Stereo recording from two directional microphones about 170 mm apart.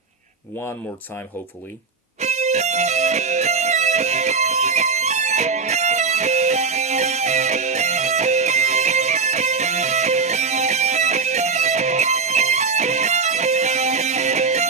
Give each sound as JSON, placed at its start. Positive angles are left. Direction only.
{"t": 2.2, "sound": "music", "side_deg": -40}